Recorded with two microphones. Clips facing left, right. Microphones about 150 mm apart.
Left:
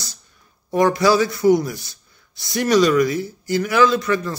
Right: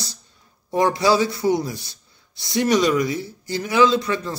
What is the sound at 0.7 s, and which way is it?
Speech, 25° right (ahead or behind).